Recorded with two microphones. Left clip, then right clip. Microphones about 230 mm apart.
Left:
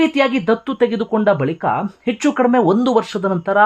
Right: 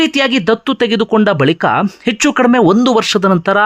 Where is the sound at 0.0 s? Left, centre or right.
Centre.